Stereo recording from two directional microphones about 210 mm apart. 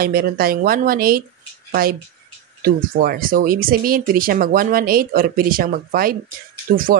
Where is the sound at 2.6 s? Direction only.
45° right (ahead or behind).